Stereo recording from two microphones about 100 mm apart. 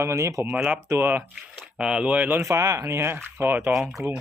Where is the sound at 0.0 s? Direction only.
30° right (ahead or behind).